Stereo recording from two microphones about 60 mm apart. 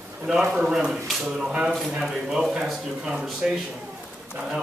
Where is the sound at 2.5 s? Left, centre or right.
Centre.